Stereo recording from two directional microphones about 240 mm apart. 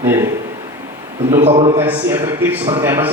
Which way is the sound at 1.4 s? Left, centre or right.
Right.